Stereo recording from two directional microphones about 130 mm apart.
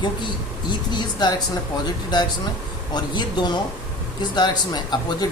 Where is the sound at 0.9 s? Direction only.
35° left (ahead or behind).